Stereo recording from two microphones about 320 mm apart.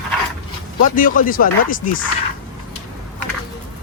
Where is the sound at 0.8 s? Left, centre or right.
Left.